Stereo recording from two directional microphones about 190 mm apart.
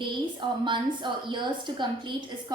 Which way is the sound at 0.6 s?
25° right (ahead or behind).